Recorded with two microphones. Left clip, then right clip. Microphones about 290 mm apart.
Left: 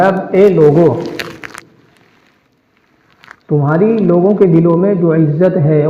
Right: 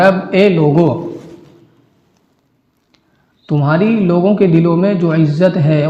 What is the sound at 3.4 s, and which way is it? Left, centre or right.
Speech, right.